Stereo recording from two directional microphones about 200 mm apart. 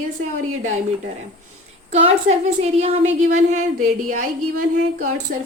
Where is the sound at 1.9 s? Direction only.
35° right (ahead or behind).